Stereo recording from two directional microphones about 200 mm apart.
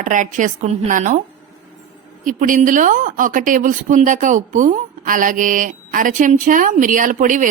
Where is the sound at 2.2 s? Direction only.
40° right (ahead or behind).